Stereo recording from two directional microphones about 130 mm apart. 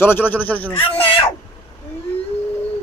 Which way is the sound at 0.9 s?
45° left (ahead or behind).